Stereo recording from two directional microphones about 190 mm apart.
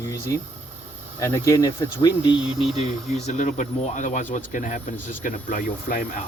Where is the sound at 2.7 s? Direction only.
35° left (ahead or behind).